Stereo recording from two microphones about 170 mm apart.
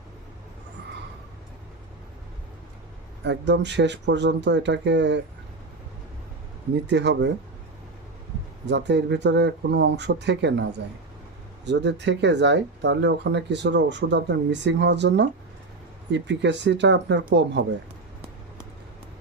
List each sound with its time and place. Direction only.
3.2 s speech: 90° right
6.8 s speech: 90° right
8.6 s speech: 90° right